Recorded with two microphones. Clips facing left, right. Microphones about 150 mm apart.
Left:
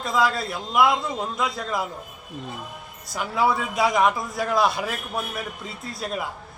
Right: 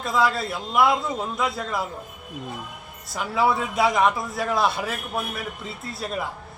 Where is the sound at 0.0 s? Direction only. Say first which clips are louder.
Even; centre (ahead or behind).